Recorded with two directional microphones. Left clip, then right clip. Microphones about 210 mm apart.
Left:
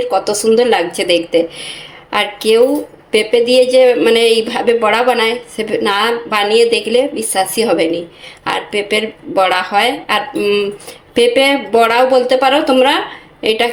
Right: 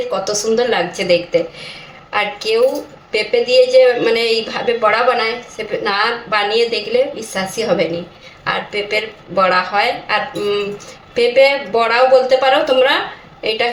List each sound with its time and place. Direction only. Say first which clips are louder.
0.1 s a woman's voice: left 6 dB; 45° left (ahead or behind)